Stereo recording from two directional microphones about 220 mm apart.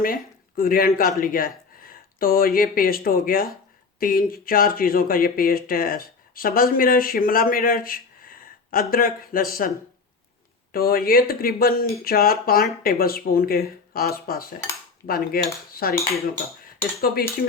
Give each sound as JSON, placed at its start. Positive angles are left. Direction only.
{"t": 0.0, "sound": "speech", "side_deg": 40}
{"t": 15.7, "sound": "cutlery", "side_deg": 45}